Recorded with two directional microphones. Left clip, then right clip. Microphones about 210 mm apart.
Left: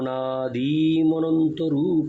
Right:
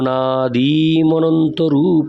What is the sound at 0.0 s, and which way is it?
Speech, 55° right (ahead or behind).